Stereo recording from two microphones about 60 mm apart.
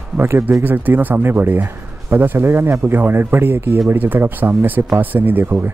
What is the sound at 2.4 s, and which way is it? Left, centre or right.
Speech, right.